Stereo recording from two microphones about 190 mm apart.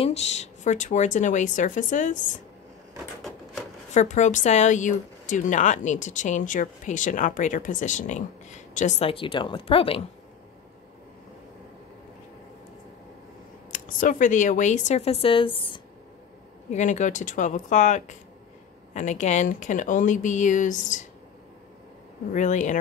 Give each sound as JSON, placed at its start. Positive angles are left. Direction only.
{"t": 0.0, "sound": "speech", "side_deg": 35}
{"t": 3.9, "sound": "speech", "side_deg": 40}
{"t": 13.7, "sound": "speech", "side_deg": 40}
{"t": 16.7, "sound": "speech", "side_deg": 40}
{"t": 22.3, "sound": "speech", "side_deg": 40}